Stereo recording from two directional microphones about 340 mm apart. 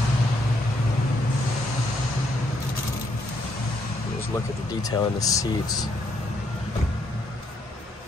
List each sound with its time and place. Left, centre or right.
4.8 s speech: centre